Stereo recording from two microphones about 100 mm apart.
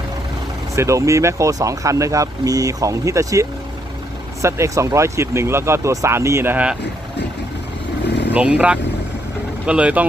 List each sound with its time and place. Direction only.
0.8 s speech: 30° right (ahead or behind)
4.4 s speech: 30° right (ahead or behind)
8.3 s speech: 15° right (ahead or behind)